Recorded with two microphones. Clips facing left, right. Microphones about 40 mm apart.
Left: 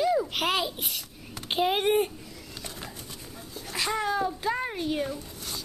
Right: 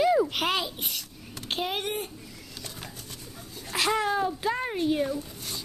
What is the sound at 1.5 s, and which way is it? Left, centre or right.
Speech, centre.